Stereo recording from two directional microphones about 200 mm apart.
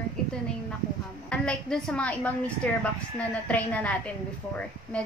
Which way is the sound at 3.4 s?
5° left (ahead or behind).